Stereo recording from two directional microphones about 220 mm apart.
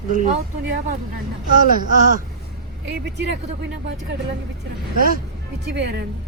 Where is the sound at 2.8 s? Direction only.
50° right (ahead or behind).